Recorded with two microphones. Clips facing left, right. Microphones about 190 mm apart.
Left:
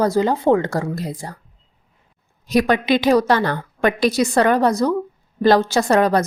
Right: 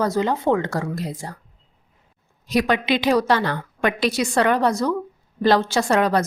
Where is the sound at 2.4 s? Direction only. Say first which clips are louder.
Left 3 dB; 45° left (ahead or behind).